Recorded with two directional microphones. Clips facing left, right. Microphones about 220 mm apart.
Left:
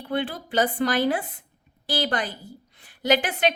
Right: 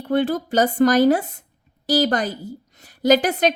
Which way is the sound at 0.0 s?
45° right (ahead or behind).